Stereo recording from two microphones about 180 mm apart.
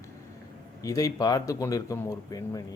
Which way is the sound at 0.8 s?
20° left (ahead or behind).